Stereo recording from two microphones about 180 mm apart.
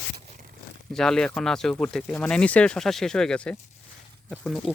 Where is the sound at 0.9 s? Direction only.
5° left (ahead or behind).